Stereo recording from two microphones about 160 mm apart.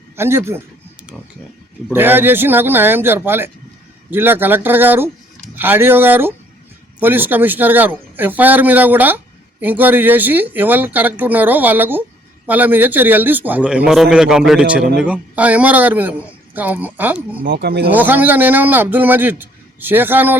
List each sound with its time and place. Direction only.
0.2 s speech: 15° right (ahead or behind)
1.9 s speech: 15° right (ahead or behind)
17.4 s speech: 85° right
17.9 s speech: 10° right (ahead or behind)